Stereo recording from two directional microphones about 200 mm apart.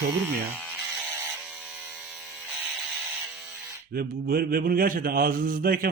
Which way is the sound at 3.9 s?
45° right (ahead or behind).